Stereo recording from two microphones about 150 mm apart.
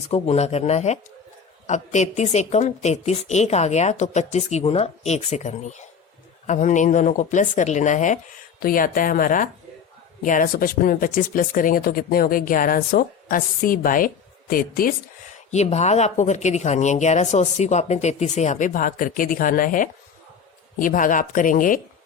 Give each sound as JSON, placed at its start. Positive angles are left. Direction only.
{"t": 0.1, "sound": "a woman's voice", "side_deg": 45}
{"t": 8.6, "sound": "speech", "side_deg": 65}
{"t": 15.4, "sound": "a woman's voice", "side_deg": 45}